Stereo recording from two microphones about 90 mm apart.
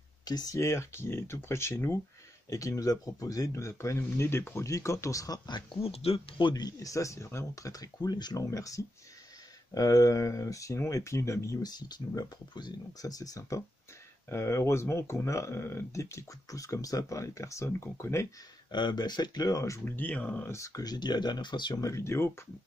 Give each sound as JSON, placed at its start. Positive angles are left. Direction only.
{"t": 0.2, "sound": "speech", "side_deg": 50}
{"t": 0.6, "sound": "speech", "side_deg": 30}
{"t": 5.5, "sound": "speech", "side_deg": 75}
{"t": 6.5, "sound": "speech", "side_deg": 45}
{"t": 12.2, "sound": "speech", "side_deg": 50}
{"t": 18.7, "sound": "speech", "side_deg": 55}
{"t": 19.8, "sound": "speech", "side_deg": 20}
{"t": 20.4, "sound": "speech", "side_deg": 35}
{"t": 21.8, "sound": "speech", "side_deg": 30}